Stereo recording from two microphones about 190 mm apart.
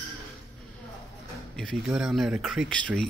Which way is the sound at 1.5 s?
5° left (ahead or behind).